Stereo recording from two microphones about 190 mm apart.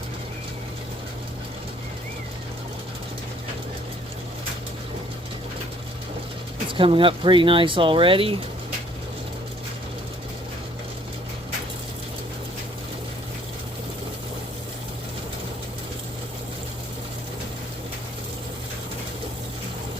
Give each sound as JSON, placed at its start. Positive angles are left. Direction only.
{"t": 6.7, "sound": "speech", "side_deg": -25}